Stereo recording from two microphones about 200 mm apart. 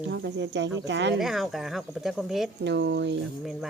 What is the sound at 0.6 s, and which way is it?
Speech, 60° right (ahead or behind).